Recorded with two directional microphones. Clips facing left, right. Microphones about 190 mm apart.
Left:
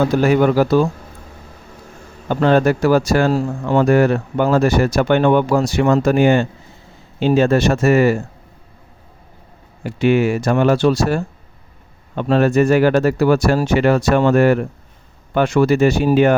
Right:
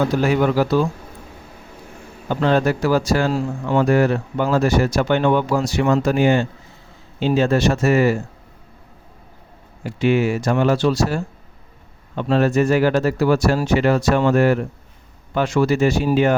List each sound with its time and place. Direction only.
0.2 s speech: 50° left (ahead or behind)
2.3 s speech: 55° left (ahead or behind)
9.8 s speech: 60° left (ahead or behind)